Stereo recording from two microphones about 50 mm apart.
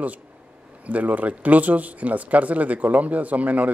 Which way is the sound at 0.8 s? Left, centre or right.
Right.